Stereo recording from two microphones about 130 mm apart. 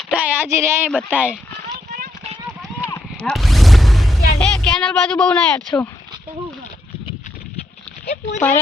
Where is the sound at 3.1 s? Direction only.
5° left (ahead or behind).